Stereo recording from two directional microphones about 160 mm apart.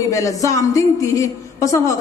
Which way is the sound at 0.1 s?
20° left (ahead or behind).